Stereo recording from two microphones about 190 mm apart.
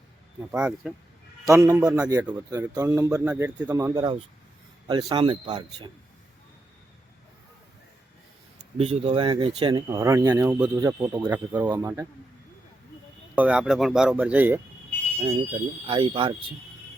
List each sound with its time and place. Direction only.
0.5 s speech: 5° right (ahead or behind)
1.5 s speech: 15° right (ahead or behind)
8.8 s speech: 30° right (ahead or behind); by 12.0 s 15° right (ahead or behind)
13.3 s speech: 5° right (ahead or behind)
15.9 s speech: 25° right (ahead or behind)